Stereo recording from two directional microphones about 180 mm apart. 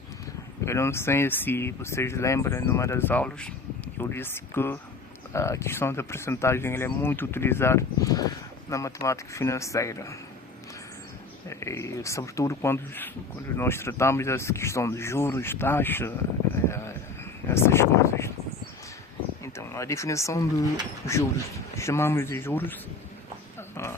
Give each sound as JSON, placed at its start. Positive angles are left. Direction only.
{"t": 0.6, "sound": "speech", "side_deg": 15}
{"t": 11.4, "sound": "speech", "side_deg": 15}
{"t": 16.6, "sound": "a sound", "side_deg": 15}
{"t": 17.5, "sound": "speech", "side_deg": 15}
{"t": 19.5, "sound": "speech", "side_deg": 15}
{"t": 21.8, "sound": "speech", "side_deg": 15}
{"t": 23.6, "sound": "a sound", "side_deg": 15}